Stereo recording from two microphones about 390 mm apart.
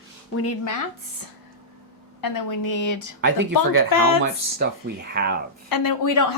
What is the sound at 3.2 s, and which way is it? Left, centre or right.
Speech, right.